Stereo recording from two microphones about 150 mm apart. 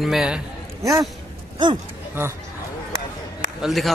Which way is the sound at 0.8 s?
20° right (ahead or behind).